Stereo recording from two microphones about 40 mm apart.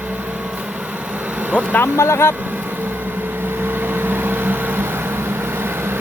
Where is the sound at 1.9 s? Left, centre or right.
Left.